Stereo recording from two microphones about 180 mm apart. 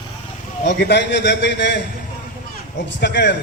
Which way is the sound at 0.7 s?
70° left (ahead or behind).